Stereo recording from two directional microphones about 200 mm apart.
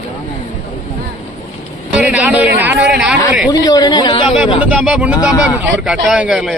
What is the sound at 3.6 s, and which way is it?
Speech, 20° left (ahead or behind).